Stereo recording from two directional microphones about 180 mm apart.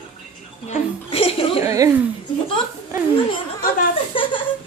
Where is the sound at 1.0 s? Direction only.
30° left (ahead or behind).